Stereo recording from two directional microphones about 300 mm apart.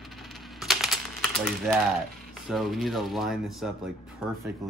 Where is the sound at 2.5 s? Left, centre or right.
Centre.